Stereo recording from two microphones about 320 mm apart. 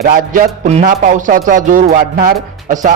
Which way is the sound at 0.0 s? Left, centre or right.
Right.